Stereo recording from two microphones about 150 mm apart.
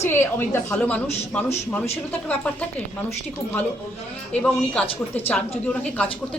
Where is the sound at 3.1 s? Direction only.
15° left (ahead or behind).